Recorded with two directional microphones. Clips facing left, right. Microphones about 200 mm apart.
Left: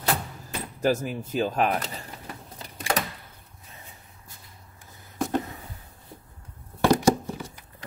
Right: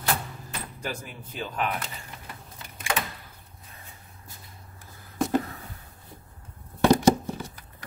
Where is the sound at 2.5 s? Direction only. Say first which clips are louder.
Left 2 dB; 35° left (ahead or behind).